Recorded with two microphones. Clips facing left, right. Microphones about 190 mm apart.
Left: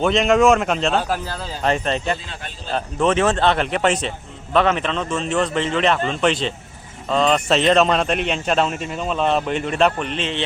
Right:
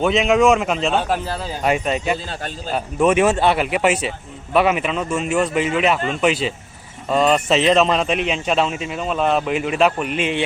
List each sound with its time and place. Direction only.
0.0 s a man's voice: 5° right (ahead or behind)
2.2 s a man's voice: 40° right (ahead or behind)
2.7 s a man's voice: 10° right (ahead or behind)